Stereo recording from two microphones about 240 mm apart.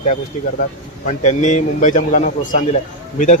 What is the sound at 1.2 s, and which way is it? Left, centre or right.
A man's voice, left.